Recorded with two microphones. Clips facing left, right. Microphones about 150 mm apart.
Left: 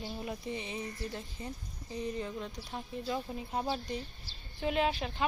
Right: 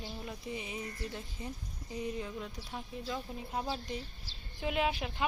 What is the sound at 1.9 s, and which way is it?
Speech, 5° right (ahead or behind).